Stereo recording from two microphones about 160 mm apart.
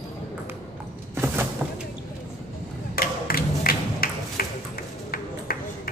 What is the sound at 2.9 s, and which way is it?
Music, 65° left (ahead or behind).